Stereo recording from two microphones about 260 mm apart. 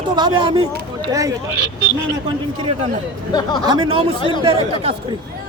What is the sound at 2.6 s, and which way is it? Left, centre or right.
Speech, right.